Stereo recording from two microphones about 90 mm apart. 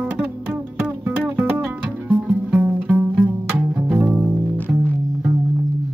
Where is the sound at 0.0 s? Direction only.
15° right (ahead or behind).